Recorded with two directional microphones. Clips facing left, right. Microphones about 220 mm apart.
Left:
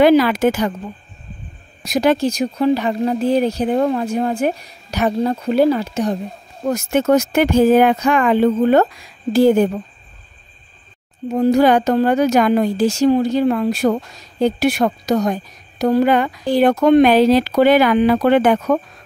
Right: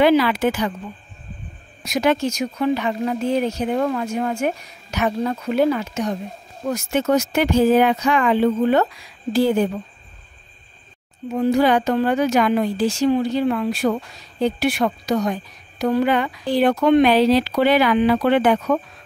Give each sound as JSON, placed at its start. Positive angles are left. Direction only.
{"t": 0.0, "sound": "a woman's voice", "side_deg": 45}
{"t": 1.8, "sound": "speech", "side_deg": 35}
{"t": 6.6, "sound": "a woman's voice", "side_deg": 50}
{"t": 11.2, "sound": "a woman's voice", "side_deg": 40}